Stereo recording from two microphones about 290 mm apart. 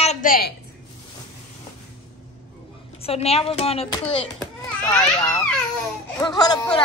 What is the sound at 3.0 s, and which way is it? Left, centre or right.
Speech, left.